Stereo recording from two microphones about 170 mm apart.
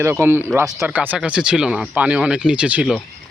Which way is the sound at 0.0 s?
15° right (ahead or behind).